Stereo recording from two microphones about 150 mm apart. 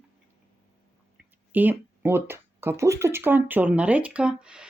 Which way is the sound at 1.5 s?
10° right (ahead or behind).